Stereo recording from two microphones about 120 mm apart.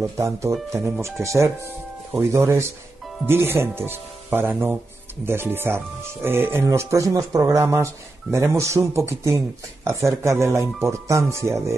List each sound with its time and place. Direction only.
0.0 s speech: 25° right (ahead or behind)